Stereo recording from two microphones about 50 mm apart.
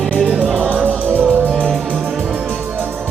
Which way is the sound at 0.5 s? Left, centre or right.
Right.